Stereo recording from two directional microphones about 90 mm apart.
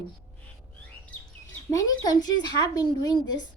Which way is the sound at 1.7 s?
45° left (ahead or behind).